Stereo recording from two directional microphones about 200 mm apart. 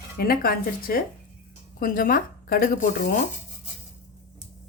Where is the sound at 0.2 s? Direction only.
45° left (ahead or behind).